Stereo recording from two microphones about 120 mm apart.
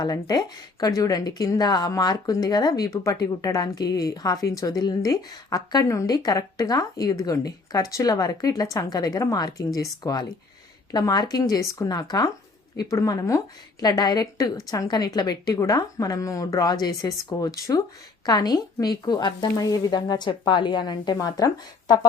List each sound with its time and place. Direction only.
0.0 s speech: 35° left (ahead or behind)